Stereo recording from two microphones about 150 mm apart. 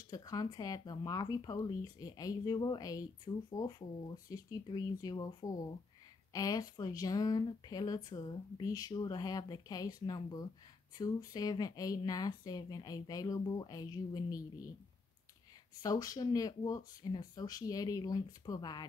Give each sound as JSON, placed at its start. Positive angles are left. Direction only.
{"t": 0.1, "sound": "speech", "side_deg": 25}
{"t": 15.8, "sound": "speech", "side_deg": 25}